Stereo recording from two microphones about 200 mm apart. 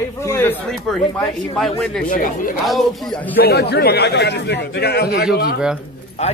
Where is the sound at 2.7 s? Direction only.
Centre (ahead or behind).